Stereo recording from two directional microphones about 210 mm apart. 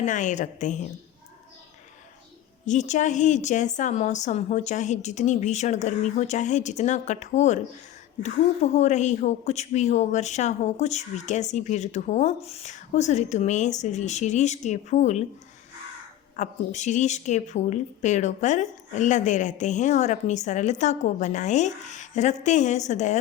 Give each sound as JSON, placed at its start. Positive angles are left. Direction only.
{"t": 0.0, "sound": "a woman's voice", "side_deg": 35}
{"t": 2.6, "sound": "a woman's voice", "side_deg": 35}
{"t": 16.3, "sound": "a woman's voice", "side_deg": 35}